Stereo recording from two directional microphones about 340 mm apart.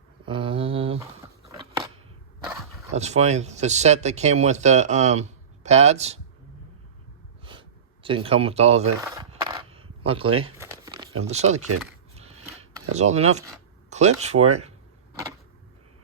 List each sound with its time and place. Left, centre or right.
0.3 s mantra: centre
2.9 s speech: centre
8.0 s speech: centre
9.0 s coin: centre
12.9 s speech: centre
14.4 s speech: centre